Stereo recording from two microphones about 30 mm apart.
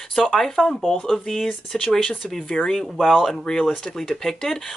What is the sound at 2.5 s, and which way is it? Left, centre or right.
Speech, left.